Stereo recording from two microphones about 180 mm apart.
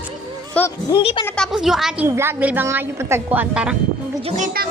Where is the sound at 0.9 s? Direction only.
25° left (ahead or behind).